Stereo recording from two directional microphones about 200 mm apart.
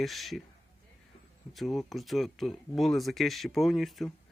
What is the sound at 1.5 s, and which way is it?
Speech, centre (ahead or behind).